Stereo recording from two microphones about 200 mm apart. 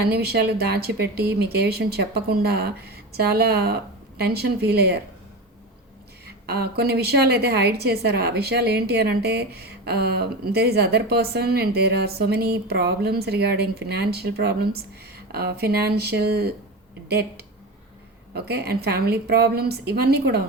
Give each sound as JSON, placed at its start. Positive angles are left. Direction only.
{"t": 0.0, "sound": "a woman's voice", "side_deg": -55}
{"t": 6.2, "sound": "a woman's voice", "side_deg": -55}